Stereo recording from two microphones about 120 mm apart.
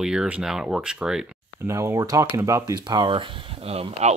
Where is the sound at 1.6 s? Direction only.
20° right (ahead or behind).